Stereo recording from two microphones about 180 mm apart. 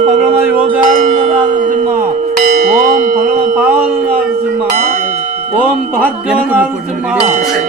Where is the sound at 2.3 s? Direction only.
50° right (ahead or behind).